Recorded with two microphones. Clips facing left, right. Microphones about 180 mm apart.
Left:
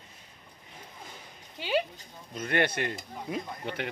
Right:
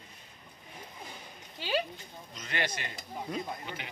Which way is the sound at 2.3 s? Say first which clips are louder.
Left 8 dB; 55° left (ahead or behind).